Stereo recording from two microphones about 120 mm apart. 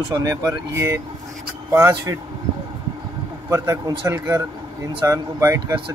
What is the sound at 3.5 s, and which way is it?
Speech, 25° right (ahead or behind).